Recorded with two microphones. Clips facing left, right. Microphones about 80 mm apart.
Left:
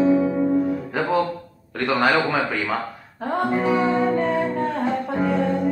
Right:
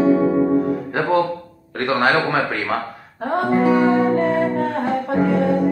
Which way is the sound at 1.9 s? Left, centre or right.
Centre.